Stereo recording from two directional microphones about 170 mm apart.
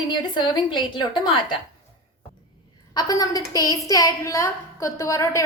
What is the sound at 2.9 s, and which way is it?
A woman's voice, 20° left (ahead or behind).